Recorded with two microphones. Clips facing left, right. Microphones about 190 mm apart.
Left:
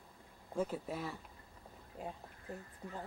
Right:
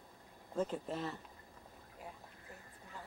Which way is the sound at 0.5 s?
10° left (ahead or behind).